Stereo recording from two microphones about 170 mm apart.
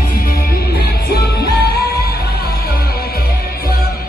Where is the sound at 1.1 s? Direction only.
70° left (ahead or behind).